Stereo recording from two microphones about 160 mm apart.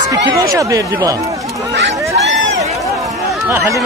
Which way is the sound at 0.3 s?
20° right (ahead or behind).